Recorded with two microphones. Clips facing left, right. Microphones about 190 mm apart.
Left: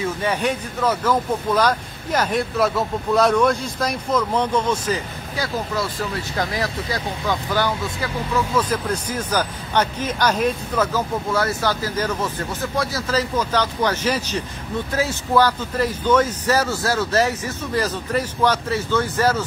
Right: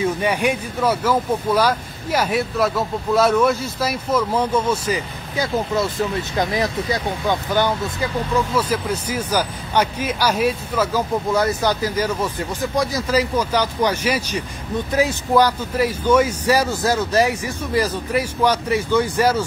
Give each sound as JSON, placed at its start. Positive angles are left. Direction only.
{"t": 0.2, "sound": "speech", "side_deg": -10}
{"t": 6.3, "sound": "speech", "side_deg": -20}
{"t": 8.5, "sound": "speech", "side_deg": -10}